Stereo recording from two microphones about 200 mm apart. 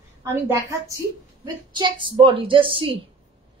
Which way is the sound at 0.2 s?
15° right (ahead or behind).